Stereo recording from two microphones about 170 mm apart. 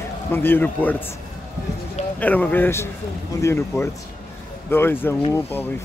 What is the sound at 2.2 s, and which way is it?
Speech, 10° left (ahead or behind).